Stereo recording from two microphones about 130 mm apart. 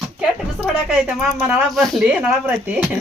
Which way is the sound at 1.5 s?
Centre (ahead or behind).